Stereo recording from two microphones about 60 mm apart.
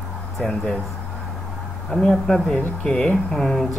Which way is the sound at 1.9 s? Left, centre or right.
Centre.